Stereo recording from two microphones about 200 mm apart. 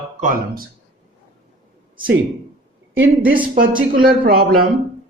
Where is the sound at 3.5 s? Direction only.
45° right (ahead or behind).